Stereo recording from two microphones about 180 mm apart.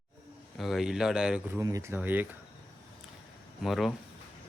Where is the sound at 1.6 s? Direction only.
20° right (ahead or behind).